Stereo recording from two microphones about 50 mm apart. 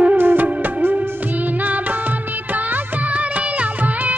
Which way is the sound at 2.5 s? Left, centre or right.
Right.